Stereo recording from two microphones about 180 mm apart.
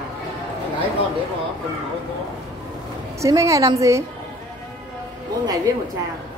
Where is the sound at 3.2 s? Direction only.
15° right (ahead or behind).